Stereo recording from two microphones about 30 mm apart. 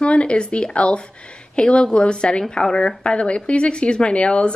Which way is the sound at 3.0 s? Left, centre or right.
Left.